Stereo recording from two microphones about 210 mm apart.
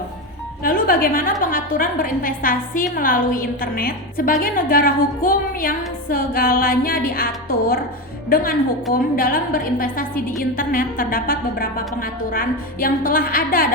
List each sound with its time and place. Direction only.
0.6 s a woman's voice: 40° left (ahead or behind)
8.3 s a woman's voice: 40° left (ahead or behind)